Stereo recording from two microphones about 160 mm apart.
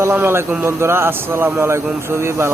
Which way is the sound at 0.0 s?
15° right (ahead or behind).